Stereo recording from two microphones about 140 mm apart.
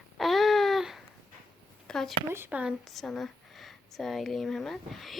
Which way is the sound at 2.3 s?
15° right (ahead or behind).